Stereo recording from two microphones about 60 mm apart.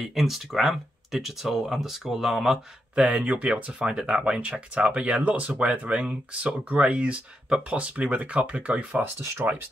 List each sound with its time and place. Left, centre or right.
0.1 s speech: centre
3.0 s speech: right